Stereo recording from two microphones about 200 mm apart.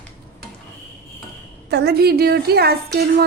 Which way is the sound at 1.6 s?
55° right (ahead or behind).